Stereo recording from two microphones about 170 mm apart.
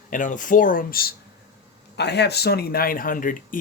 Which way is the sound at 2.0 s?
80° left.